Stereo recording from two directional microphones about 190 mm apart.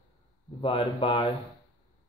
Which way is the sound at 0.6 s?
30° left (ahead or behind).